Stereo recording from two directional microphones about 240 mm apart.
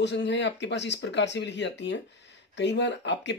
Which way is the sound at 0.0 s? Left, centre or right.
Left.